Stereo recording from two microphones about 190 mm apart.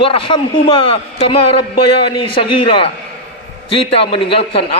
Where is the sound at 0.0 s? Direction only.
30° left (ahead or behind).